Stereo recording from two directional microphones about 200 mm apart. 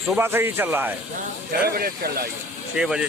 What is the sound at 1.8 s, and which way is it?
Speech, 50° right (ahead or behind).